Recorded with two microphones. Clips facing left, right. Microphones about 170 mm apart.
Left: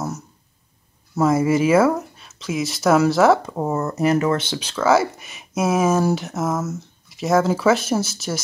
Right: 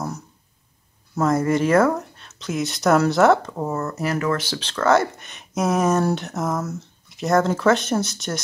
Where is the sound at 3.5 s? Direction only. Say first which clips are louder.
Left 3 dB; 20° left (ahead or behind).